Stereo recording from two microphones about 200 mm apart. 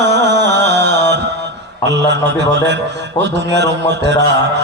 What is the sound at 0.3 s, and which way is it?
Music, 60° right (ahead or behind).